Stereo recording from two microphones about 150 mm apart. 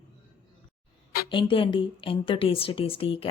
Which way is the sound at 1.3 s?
35° left (ahead or behind).